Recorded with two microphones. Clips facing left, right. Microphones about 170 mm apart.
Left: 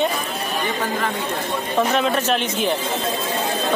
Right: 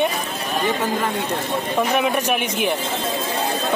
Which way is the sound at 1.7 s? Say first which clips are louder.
Left 1 dB; 15° right (ahead or behind).